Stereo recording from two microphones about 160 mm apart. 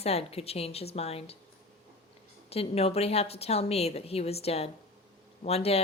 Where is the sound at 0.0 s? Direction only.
40° left (ahead or behind).